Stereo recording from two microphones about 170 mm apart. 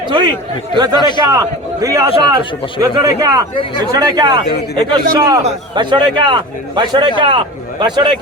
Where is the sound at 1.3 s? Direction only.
20° right (ahead or behind).